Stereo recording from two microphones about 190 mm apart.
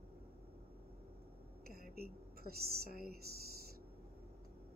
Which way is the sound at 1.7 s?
55° right (ahead or behind).